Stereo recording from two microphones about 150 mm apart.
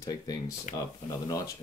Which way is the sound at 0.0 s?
25° left (ahead or behind).